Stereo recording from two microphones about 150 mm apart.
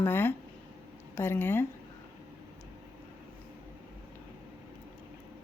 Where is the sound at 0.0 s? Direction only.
15° left (ahead or behind).